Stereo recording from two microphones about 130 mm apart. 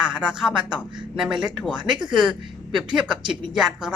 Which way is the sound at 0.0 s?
10° right (ahead or behind).